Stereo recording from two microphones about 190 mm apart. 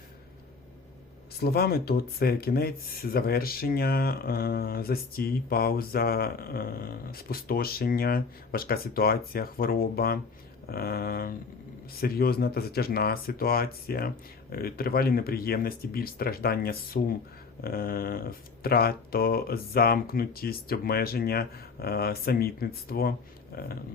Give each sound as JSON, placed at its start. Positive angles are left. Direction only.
{"t": 1.4, "sound": "speech", "side_deg": 55}